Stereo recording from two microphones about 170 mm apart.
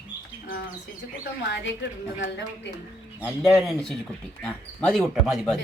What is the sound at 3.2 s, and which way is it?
Speech, 5° right (ahead or behind).